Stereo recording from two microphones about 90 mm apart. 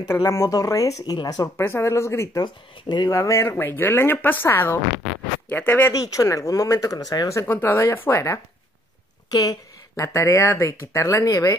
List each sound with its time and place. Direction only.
0.0 s speech: 35° left (ahead or behind)
1.6 s speech: 25° left (ahead or behind)
2.4 s speech: 55° left (ahead or behind)
3.1 s speech: 35° left (ahead or behind)
5.9 s speech: 40° left (ahead or behind)
7.4 s speech: 25° left (ahead or behind)
9.3 s speech: 40° left (ahead or behind)